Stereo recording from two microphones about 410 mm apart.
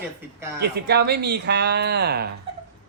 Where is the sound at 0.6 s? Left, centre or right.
Right.